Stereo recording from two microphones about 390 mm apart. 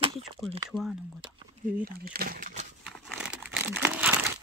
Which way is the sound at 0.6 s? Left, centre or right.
Centre.